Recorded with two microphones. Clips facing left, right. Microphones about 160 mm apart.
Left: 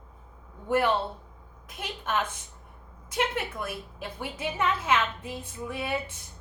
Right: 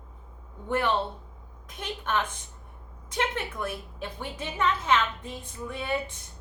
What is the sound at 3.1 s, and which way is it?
A woman's voice, 5° left (ahead or behind).